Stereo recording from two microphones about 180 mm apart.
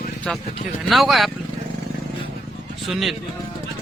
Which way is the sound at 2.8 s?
Centre (ahead or behind).